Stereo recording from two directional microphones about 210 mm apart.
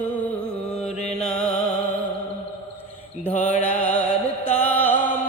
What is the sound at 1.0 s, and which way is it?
Music, 30° left (ahead or behind).